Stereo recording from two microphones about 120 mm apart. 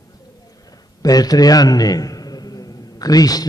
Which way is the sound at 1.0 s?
30° left (ahead or behind).